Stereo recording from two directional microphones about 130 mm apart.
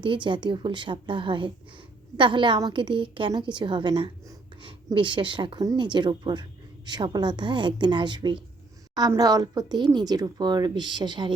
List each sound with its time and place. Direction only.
0.0 s a woman's voice: 40° right (ahead or behind)